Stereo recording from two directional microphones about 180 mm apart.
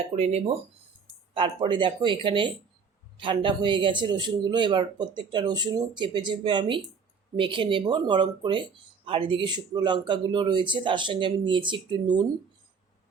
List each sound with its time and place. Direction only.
0.1 s speech: 35° right (ahead or behind)
1.3 s speech: 25° right (ahead or behind)